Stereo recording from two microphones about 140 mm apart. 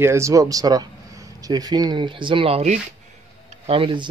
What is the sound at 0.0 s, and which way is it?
Speech, 20° right (ahead or behind).